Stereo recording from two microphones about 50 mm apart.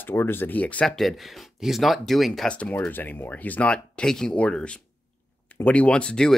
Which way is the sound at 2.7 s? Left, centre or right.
Left.